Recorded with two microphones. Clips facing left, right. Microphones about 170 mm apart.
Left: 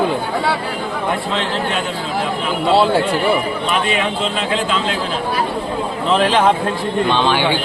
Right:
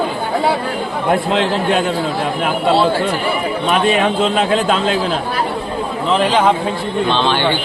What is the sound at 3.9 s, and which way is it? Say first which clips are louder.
A man's voice: right 5 dB; 50° right (ahead or behind).